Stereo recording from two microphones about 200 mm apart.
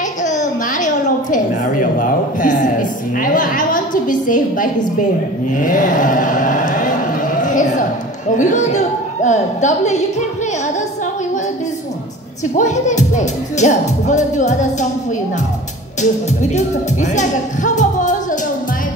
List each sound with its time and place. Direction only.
0.2 s a child's voice: 40° left (ahead or behind)
12.5 s speech: 35° left (ahead or behind)
16.0 s speech: 35° left (ahead or behind)
17.7 s music: 40° left (ahead or behind)